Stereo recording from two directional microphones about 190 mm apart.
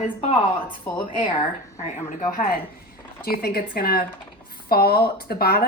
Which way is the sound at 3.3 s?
55° left (ahead or behind).